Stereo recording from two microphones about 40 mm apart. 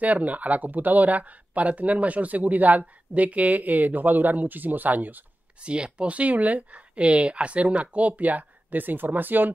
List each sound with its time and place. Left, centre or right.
0.0 s speech: right
5.6 s speech: right